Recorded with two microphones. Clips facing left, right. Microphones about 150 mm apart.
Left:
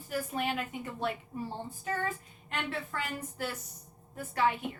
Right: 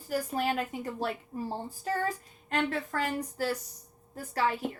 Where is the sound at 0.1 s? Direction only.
35° right (ahead or behind).